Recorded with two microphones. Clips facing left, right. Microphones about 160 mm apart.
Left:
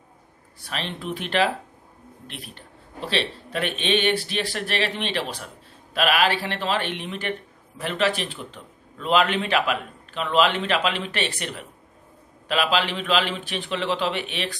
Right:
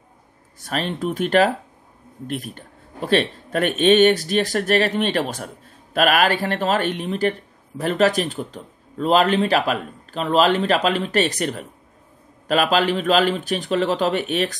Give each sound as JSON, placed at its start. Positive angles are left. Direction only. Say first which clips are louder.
{"t": 0.6, "sound": "a man's voice", "louder": "right 7 dB", "side_deg": -45}